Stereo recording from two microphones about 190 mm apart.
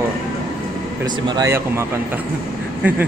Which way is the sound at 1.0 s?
20° right (ahead or behind).